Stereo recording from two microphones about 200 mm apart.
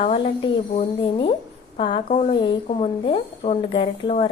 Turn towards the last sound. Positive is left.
turn(degrees=25)  # may be behind; listen again after turning